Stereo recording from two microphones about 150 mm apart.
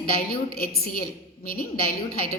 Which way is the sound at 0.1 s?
90° left.